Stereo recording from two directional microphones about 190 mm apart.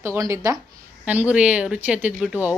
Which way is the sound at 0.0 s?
15° right (ahead or behind).